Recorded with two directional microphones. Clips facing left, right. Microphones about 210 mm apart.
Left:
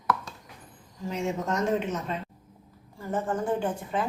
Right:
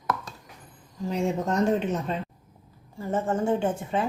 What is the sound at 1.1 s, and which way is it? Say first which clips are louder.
Speech: right 3 dB; 35° right (ahead or behind).